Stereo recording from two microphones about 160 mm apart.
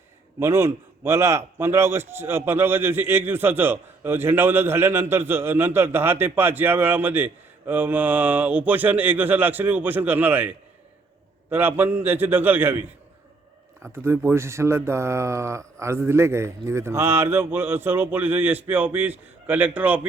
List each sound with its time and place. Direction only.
0.3 s a man's voice: 15° right (ahead or behind)
13.9 s a man's voice: 15° right (ahead or behind)